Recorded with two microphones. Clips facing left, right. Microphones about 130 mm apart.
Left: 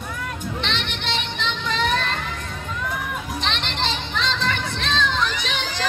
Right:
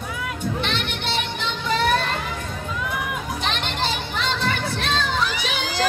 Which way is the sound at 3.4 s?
10° right (ahead or behind).